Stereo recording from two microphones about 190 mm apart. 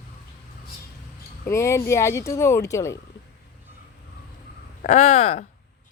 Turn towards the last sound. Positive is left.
turn(degrees=35)  # may be behind; listen again after turning